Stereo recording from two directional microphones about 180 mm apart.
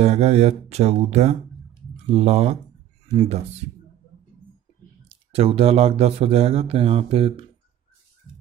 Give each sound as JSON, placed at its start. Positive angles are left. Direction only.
{"t": 0.0, "sound": "speech", "side_deg": -40}
{"t": 5.0, "sound": "speech", "side_deg": -35}